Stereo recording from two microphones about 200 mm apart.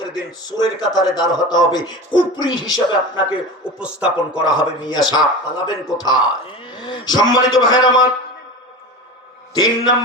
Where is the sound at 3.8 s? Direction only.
5° right (ahead or behind).